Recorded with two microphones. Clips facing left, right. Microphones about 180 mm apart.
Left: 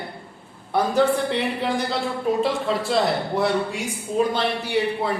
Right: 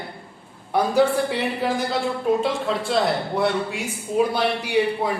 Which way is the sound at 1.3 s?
5° right (ahead or behind).